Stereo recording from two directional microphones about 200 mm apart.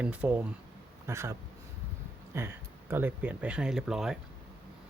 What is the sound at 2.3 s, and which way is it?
Speech, 10° right (ahead or behind).